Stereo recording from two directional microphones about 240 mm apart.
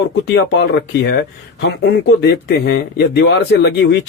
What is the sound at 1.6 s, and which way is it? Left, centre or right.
Speech, left.